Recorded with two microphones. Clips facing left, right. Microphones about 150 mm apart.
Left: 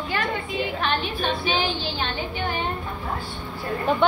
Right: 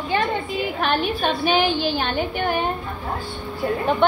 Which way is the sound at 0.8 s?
50° right (ahead or behind).